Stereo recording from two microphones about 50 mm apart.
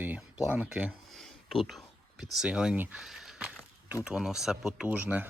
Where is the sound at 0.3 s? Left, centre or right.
Right.